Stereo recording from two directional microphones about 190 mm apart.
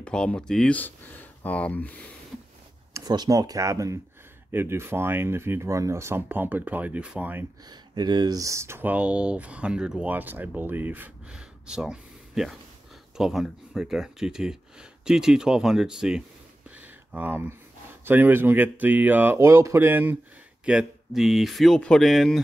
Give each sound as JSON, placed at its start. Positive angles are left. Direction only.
{"t": 0.0, "sound": "speech", "side_deg": 5}
{"t": 2.9, "sound": "speech", "side_deg": -20}
{"t": 7.7, "sound": "speech", "side_deg": -20}
{"t": 16.7, "sound": "a sound", "side_deg": -10}
{"t": 18.0, "sound": "speech", "side_deg": -10}